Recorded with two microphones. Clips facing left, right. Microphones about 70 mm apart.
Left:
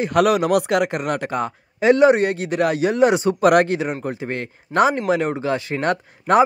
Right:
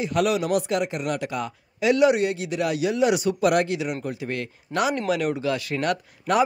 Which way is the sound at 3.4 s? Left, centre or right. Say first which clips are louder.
Left 6 dB; left.